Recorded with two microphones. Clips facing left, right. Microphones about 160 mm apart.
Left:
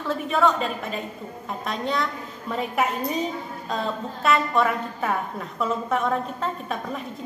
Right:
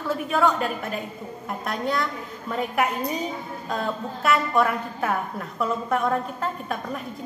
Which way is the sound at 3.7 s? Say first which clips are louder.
Even; 5° right (ahead or behind).